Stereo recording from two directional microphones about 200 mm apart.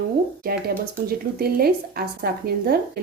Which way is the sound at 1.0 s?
50° right (ahead or behind).